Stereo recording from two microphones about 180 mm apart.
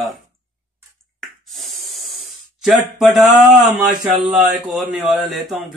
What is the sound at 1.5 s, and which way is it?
Hiss, centre (ahead or behind).